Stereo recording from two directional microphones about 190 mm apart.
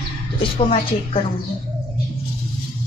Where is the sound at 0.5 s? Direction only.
35° left (ahead or behind).